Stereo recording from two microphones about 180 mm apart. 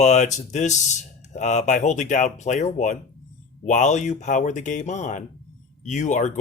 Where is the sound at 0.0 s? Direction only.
40° left (ahead or behind).